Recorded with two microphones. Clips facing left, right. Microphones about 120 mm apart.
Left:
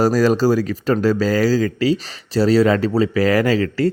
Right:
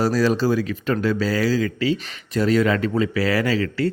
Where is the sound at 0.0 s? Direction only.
40° left (ahead or behind).